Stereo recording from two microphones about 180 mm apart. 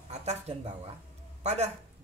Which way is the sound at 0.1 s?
40° right (ahead or behind).